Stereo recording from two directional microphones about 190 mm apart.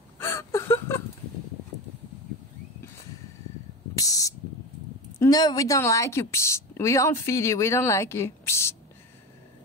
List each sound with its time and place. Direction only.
0.2 s a sound: 15° left (ahead or behind)
3.9 s spray: 20° left (ahead or behind)
5.2 s a woman's voice: 20° left (ahead or behind)